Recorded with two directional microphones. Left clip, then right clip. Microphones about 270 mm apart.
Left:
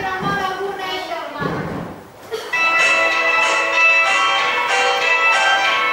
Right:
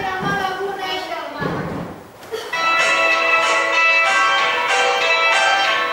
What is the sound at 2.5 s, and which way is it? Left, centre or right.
Music, centre.